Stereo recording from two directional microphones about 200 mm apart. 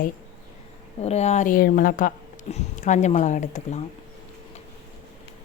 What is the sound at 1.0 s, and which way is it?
A woman's voice, 35° left (ahead or behind).